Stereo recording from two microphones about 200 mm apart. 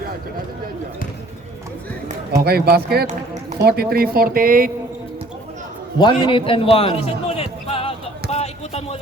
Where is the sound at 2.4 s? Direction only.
50° right (ahead or behind).